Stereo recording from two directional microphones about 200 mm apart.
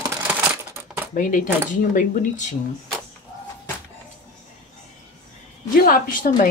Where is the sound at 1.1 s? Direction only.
40° left (ahead or behind).